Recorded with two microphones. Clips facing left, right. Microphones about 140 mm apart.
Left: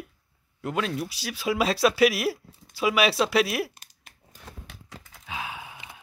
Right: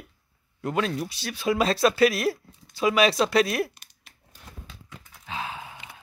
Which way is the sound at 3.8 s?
45° left (ahead or behind).